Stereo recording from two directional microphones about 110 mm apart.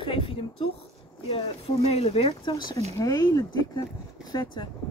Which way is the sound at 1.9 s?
70° left (ahead or behind).